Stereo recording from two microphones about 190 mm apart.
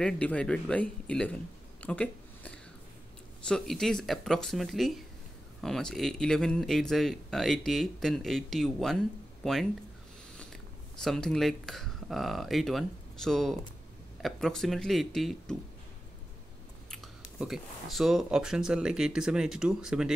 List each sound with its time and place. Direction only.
0.0 s speech: 5° left (ahead or behind)
16.9 s speech: centre (ahead or behind)